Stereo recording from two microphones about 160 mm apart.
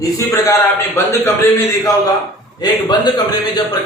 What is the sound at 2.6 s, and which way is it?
A man's voice, 25° left (ahead or behind).